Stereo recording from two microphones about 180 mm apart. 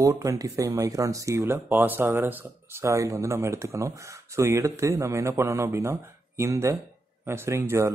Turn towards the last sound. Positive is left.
turn(degrees=-15)  # may be behind; listen again after turning